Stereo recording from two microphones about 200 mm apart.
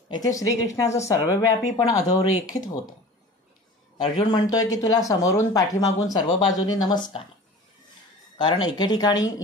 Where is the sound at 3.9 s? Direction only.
25° left (ahead or behind).